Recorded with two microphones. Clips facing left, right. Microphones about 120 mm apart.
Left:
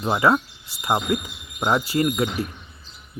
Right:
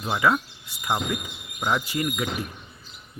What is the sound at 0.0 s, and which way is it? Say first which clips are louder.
Speech: left 4 dB; 35° left (ahead or behind).